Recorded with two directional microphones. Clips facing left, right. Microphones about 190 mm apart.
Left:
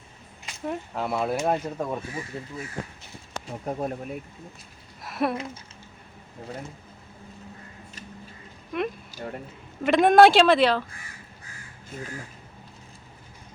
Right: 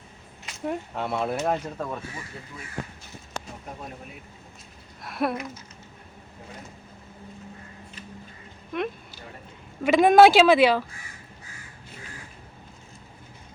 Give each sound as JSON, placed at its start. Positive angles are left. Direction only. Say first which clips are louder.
{"t": 0.4, "sound": "speech", "louder": "right 1 dB", "side_deg": 0}
{"t": 3.7, "sound": "speech", "louder": "left 11 dB", "side_deg": 45}
{"t": 5.0, "sound": "speech", "louder": "left 1 dB", "side_deg": 0}
{"t": 8.7, "sound": "speech", "louder": "left 1 dB", "side_deg": 0}